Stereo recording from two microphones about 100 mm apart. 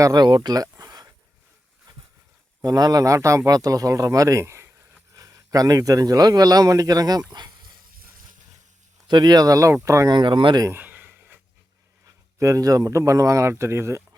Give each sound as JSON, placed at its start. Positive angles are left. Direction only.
{"t": 0.0, "sound": "speech", "side_deg": -45}
{"t": 2.6, "sound": "speech", "side_deg": -40}
{"t": 5.1, "sound": "speech", "side_deg": -35}
{"t": 9.0, "sound": "speech", "side_deg": -45}
{"t": 10.1, "sound": "speech", "side_deg": -50}
{"t": 10.7, "sound": "a sound", "side_deg": -15}
{"t": 12.0, "sound": "speech", "side_deg": -35}